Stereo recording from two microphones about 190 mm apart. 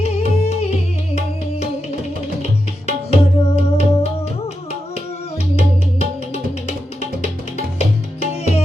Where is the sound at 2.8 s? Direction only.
30° left (ahead or behind).